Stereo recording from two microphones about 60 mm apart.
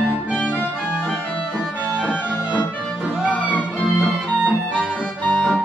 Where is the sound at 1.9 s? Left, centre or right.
Centre.